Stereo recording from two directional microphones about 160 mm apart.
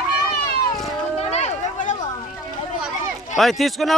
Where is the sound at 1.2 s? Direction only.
45° left (ahead or behind).